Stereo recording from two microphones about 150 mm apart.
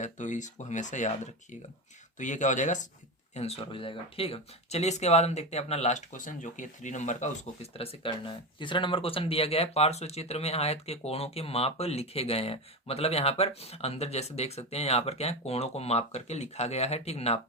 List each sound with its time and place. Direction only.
0.0 s speech: 55° left (ahead or behind)
3.3 s speech: 40° left (ahead or behind)